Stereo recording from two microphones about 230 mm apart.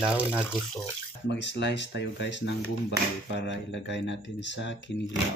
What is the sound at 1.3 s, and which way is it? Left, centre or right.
Speech, left.